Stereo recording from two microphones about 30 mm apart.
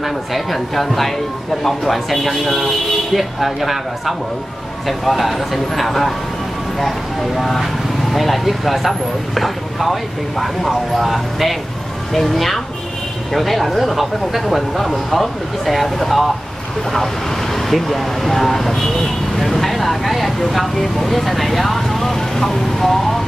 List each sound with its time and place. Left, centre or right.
0.0 s speech: centre
12.1 s speech: centre